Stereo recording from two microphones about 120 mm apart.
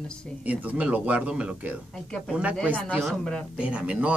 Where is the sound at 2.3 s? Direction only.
10° right (ahead or behind).